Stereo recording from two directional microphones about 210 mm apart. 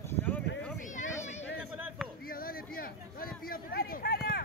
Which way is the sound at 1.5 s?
10° right (ahead or behind).